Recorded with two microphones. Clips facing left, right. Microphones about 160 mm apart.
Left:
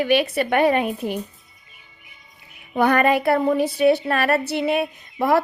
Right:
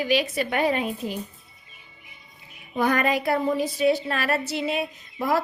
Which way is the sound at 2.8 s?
65° left (ahead or behind).